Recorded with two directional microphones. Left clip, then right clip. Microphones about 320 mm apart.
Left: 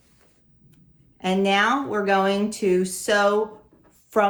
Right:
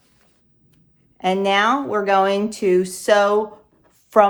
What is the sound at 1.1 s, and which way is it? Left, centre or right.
A woman's voice, right.